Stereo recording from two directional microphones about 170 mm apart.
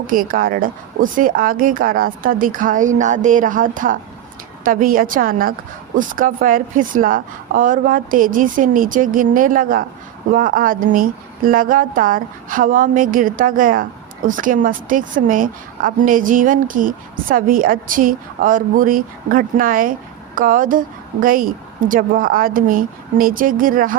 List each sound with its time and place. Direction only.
0.1 s a woman's voice: 55° right (ahead or behind)